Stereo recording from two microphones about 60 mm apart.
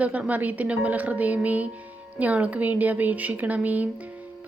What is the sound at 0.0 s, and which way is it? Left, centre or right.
A woman's voice, right.